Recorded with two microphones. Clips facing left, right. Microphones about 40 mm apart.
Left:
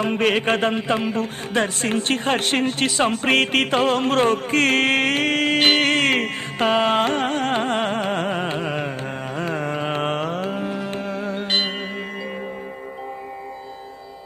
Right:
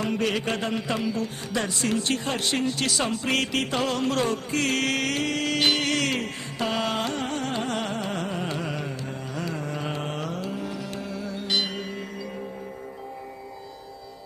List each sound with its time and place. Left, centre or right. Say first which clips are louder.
0.0 s a man's voice: left 6 dB; left
2.8 s music: left 6 dB; left
9.3 s carnatic music: left 7 dB; left